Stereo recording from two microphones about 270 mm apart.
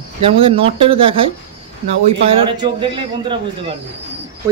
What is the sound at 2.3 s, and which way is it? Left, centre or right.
Speech, centre.